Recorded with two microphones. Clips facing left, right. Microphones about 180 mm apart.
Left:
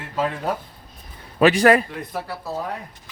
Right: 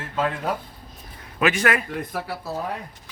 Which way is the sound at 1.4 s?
35° left (ahead or behind).